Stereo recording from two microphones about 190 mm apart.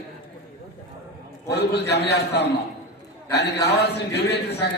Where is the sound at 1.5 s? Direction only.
60° left (ahead or behind).